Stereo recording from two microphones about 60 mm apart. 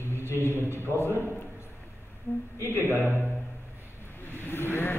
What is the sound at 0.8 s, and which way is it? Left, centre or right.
Speech, left.